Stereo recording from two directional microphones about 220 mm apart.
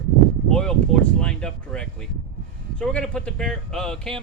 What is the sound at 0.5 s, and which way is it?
A man's voice, 5° left (ahead or behind).